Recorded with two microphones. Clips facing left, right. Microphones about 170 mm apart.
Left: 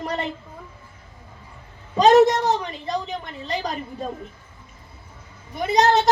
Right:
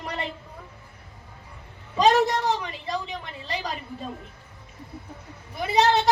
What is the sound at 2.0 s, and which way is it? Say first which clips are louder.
Speech: left 6 dB; 40° left (ahead or behind).